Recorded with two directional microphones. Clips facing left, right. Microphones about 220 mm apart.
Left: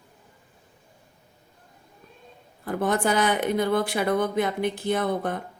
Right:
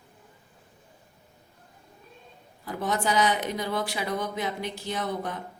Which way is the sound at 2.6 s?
55° left (ahead or behind).